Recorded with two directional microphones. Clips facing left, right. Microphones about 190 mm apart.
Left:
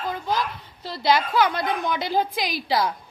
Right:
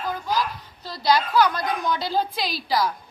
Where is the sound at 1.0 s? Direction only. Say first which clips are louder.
Right 1 dB; 25° left (ahead or behind).